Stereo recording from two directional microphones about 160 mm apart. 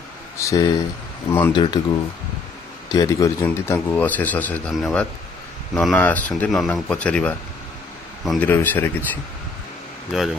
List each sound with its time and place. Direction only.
0.4 s a man's voice: 20° left (ahead or behind)
10.1 s speech: centre (ahead or behind)